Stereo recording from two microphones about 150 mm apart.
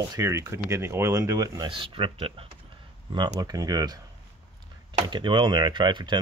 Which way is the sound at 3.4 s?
25° right (ahead or behind).